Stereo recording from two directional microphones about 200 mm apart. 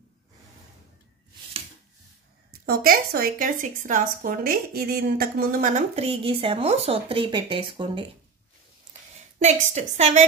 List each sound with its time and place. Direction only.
2.6 s a woman's voice: 50° right (ahead or behind); by 8.0 s 25° right (ahead or behind)
9.4 s a woman's voice: 35° right (ahead or behind)